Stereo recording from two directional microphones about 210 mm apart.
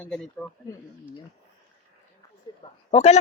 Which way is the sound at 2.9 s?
30° left (ahead or behind).